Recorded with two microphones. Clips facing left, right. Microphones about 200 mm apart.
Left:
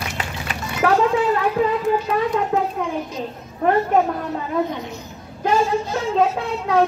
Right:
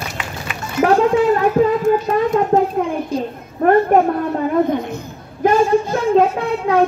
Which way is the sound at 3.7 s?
55° right (ahead or behind).